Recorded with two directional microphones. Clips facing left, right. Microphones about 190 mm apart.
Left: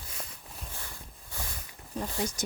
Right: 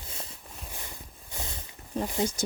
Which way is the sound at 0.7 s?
20° right (ahead or behind).